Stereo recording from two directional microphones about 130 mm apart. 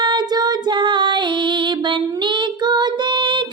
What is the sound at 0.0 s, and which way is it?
Female singing, 35° right (ahead or behind).